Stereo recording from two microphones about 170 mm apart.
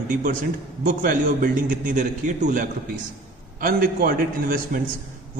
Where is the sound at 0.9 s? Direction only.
55° right (ahead or behind).